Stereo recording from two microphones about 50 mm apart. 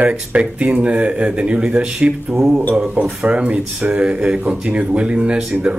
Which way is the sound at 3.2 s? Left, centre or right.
Right.